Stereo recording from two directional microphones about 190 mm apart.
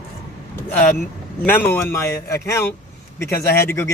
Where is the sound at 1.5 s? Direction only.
10° left (ahead or behind).